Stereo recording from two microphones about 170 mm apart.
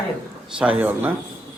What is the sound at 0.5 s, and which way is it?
Speech, 5° right (ahead or behind).